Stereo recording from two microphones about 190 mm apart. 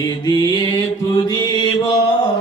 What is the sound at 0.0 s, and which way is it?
Mantra, 20° left (ahead or behind).